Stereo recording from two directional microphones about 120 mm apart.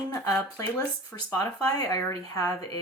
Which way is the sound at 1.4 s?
30° left (ahead or behind).